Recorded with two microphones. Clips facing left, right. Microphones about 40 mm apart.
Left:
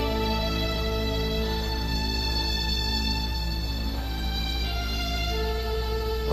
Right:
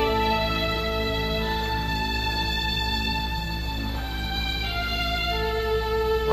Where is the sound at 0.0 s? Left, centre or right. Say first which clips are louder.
Right 5 dB; right.